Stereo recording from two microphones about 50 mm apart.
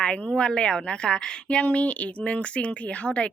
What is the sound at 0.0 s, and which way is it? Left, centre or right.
A woman's voice, centre.